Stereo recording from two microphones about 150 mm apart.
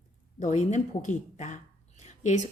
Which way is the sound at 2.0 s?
50° left (ahead or behind).